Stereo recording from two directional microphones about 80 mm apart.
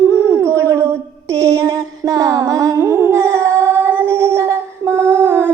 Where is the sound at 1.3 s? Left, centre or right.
Right.